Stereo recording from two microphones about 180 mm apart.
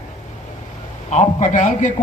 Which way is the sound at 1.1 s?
40° left (ahead or behind).